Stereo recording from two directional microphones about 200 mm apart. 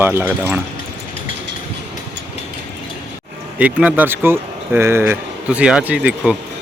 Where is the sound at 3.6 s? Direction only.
5° right (ahead or behind).